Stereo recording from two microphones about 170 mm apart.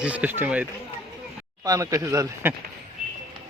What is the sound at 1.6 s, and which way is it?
Speech, 20° right (ahead or behind).